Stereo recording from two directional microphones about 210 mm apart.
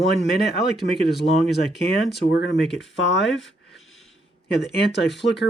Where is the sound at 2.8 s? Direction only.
60° left (ahead or behind).